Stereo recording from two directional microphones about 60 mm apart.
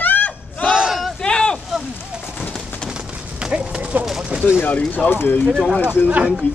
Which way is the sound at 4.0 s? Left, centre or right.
Centre.